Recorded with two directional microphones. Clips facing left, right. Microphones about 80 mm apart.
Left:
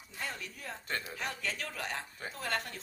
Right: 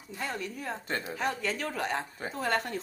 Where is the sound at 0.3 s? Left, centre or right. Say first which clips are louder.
Right 8 dB; right.